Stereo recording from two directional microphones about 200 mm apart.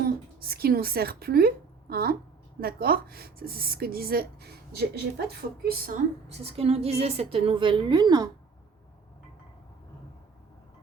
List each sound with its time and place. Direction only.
0.3 s a woman's voice: 50° right (ahead or behind)
6.2 s a woman's voice: 30° right (ahead or behind)